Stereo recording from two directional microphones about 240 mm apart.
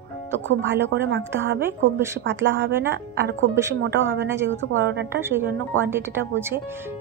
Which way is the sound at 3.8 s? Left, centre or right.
Right.